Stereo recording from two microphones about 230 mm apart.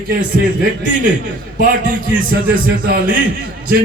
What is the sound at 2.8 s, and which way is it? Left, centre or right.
Speech, right.